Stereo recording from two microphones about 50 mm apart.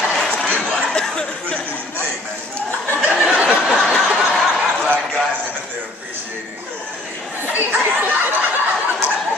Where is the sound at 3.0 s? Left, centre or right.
Right.